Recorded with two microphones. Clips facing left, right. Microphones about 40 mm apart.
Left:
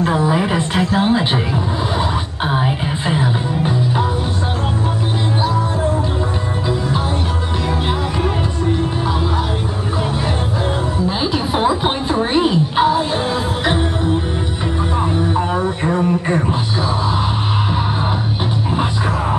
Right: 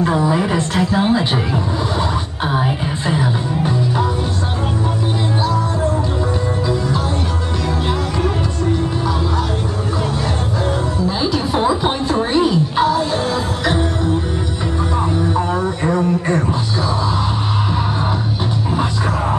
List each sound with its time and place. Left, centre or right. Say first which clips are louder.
0.0 s a woman's voice: even; centre
2.4 s music: even; centre
11.1 s music: right 1 dB; centre
15.1 s a sound: even; centre